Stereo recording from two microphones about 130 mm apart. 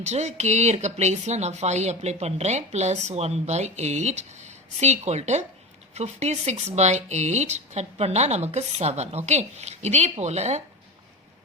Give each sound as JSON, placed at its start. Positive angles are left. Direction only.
{"t": 0.0, "sound": "speech", "side_deg": -60}